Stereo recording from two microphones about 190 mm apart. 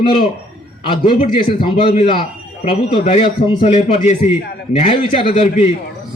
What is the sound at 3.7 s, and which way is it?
A man's voice, 40° left (ahead or behind).